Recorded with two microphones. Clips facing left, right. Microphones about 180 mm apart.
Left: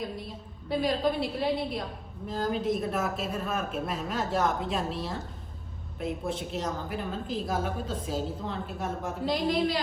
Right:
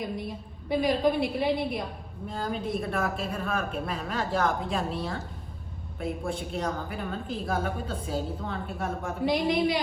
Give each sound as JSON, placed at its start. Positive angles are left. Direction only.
{"t": 0.7, "sound": "a woman's voice", "side_deg": 0}